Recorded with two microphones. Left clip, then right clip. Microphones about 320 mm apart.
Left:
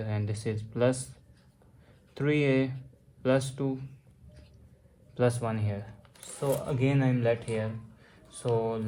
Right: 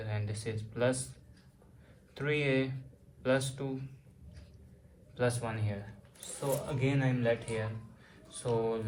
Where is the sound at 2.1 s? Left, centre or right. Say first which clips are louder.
Left 4 dB; left.